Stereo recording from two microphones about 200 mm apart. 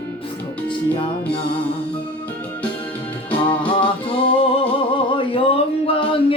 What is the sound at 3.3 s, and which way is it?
Music, 25° left (ahead or behind).